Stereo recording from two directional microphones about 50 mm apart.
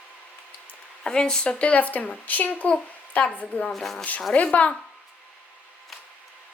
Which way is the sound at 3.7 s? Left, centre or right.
Centre.